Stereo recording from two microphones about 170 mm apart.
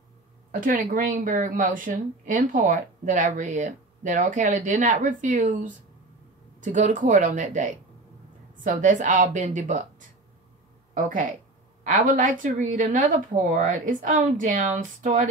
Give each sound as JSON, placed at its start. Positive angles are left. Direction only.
{"t": 0.5, "sound": "a woman's voice", "side_deg": -50}
{"t": 11.8, "sound": "a woman's voice", "side_deg": -50}